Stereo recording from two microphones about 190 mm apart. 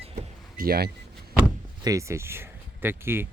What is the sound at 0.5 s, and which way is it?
Speech, 50° right (ahead or behind).